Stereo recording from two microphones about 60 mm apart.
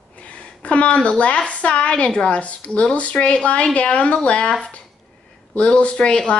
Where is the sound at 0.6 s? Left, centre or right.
Left.